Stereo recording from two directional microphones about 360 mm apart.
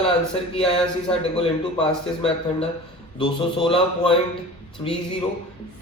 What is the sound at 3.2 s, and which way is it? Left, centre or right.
Speech, centre.